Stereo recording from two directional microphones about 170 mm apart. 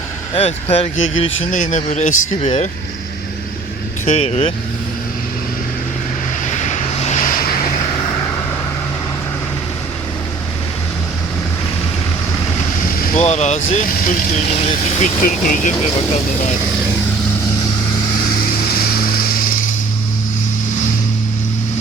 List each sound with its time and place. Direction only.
0.3 s speech: 40° left (ahead or behind)
4.0 s speech: 35° left (ahead or behind)
6.4 s vehicle: 45° left (ahead or behind)
13.1 s speech: 40° left (ahead or behind)
13.8 s speech: 50° left (ahead or behind)
18.7 s vehicle: 60° left (ahead or behind)